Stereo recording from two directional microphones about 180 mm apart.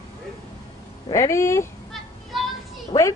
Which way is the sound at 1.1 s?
15° left (ahead or behind).